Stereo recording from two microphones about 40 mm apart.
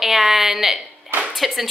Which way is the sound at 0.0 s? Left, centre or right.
Centre.